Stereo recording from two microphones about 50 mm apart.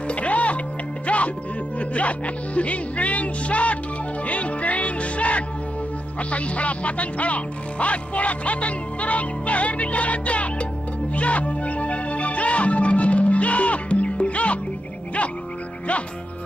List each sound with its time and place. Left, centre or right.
0.1 s music: left
1.8 s speech: left
4.3 s music: left
6.3 s speech: left
11.1 s music: left